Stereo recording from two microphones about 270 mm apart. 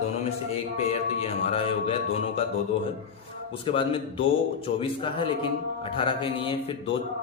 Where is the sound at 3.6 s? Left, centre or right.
Centre.